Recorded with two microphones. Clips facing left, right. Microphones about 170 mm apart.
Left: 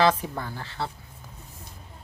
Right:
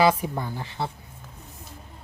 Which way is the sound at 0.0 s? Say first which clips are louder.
Right 2 dB; 10° right (ahead or behind).